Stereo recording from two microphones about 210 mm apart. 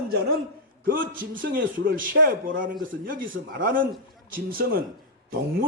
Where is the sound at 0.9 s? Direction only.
40° right (ahead or behind).